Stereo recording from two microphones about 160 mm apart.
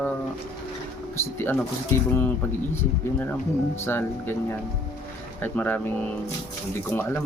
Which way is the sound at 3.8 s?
15° left (ahead or behind).